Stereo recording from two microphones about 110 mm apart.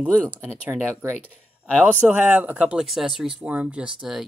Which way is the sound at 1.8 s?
15° right (ahead or behind).